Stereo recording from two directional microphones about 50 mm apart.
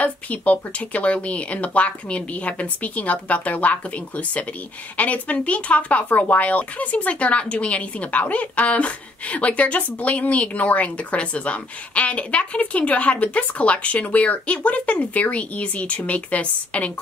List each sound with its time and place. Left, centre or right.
0.0 s speech: left